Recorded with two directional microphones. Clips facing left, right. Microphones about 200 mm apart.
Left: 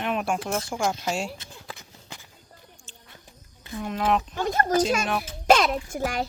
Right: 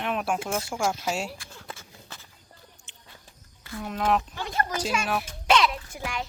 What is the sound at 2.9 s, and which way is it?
Bird, 20° right (ahead or behind).